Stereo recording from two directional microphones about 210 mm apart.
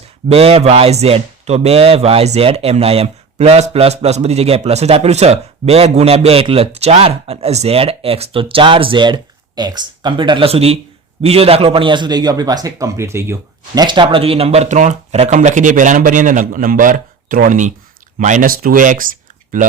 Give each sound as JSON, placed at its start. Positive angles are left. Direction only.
{"t": 0.3, "sound": "speech", "side_deg": -30}